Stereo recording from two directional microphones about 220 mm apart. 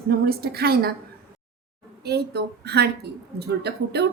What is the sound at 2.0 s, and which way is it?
A woman's voice, 50° right (ahead or behind).